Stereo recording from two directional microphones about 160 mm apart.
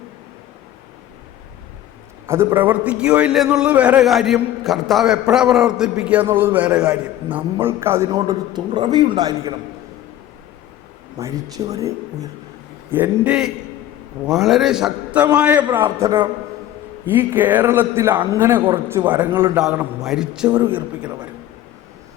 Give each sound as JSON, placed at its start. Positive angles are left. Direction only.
{"t": 2.2, "sound": "a man's voice", "side_deg": -15}
{"t": 11.2, "sound": "speech", "side_deg": -20}
{"t": 12.9, "sound": "a man's voice", "side_deg": -10}